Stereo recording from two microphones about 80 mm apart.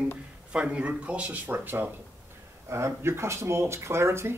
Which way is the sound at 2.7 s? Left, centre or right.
Right.